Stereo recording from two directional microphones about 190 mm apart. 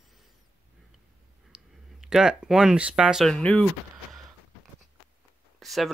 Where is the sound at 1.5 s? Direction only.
5° right (ahead or behind).